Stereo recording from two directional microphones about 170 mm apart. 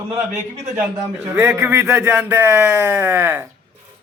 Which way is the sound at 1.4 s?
15° right (ahead or behind).